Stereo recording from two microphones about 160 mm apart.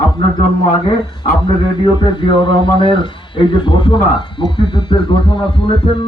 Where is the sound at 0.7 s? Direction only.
30° left (ahead or behind).